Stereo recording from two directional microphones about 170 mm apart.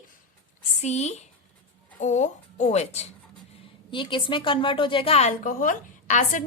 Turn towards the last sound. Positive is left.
turn(degrees=50)  # may be behind; listen again after turning